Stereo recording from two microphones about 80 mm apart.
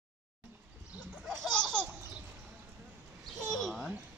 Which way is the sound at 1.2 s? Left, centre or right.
Centre.